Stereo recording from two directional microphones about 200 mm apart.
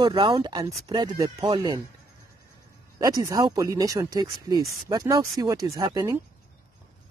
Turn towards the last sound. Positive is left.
turn(degrees=-20)  # may be behind; listen again after turning